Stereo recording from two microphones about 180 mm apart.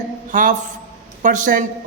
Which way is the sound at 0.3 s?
45° right (ahead or behind).